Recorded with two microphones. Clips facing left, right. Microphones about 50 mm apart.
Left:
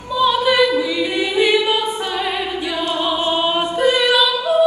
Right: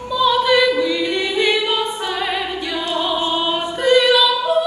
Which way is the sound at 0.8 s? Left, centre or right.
Centre.